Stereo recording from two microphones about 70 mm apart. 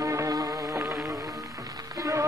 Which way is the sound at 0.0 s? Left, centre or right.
Right.